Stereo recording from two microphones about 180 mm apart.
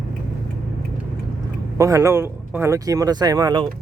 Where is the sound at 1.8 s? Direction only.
15° right (ahead or behind).